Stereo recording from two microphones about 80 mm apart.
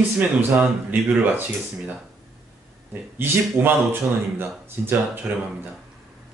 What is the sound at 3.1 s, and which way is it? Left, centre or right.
Speech, right.